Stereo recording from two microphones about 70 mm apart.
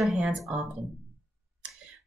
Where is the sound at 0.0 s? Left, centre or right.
Centre.